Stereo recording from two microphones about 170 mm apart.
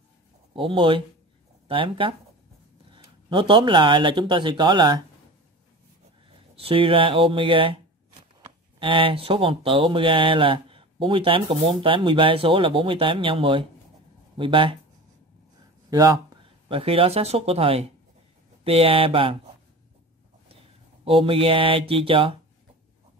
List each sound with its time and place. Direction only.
0.6 s speech: 30° right (ahead or behind)
6.5 s speech: 35° right (ahead or behind)
8.7 s speech: 30° right (ahead or behind)
15.9 s speech: 20° right (ahead or behind)
21.0 s speech: 30° right (ahead or behind)